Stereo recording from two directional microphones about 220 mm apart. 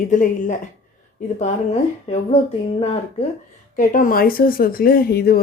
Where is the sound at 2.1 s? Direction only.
25° left (ahead or behind).